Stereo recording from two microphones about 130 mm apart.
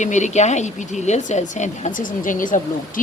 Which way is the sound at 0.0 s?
65° left (ahead or behind).